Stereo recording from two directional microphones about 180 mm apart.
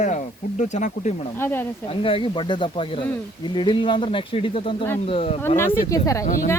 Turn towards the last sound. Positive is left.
turn(degrees=50)  # may be behind; listen again after turning